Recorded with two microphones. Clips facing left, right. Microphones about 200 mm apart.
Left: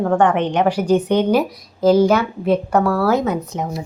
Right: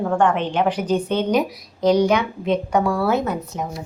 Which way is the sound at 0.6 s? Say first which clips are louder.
Left 4 dB; 10° left (ahead or behind).